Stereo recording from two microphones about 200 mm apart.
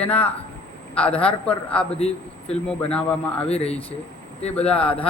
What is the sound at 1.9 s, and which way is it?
Speech, 30° left (ahead or behind).